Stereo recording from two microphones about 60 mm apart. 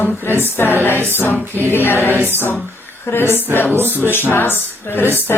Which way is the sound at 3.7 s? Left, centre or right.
Right.